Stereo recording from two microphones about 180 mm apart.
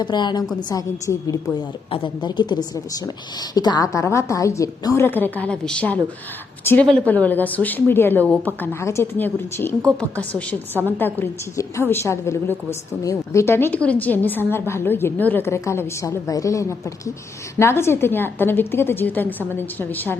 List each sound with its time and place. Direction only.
0.0 s a woman's voice: 25° left (ahead or behind)